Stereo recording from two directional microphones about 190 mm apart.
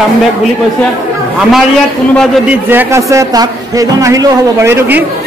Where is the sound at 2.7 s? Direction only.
15° right (ahead or behind).